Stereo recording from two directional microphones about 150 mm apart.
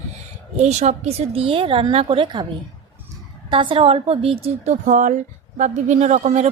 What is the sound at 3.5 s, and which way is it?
A woman's voice, 35° right (ahead or behind).